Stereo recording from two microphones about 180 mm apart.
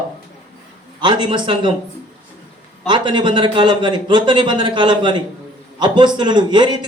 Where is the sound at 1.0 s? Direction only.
25° right (ahead or behind).